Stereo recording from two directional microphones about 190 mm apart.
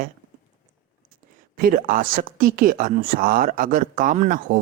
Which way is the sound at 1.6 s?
45° right (ahead or behind).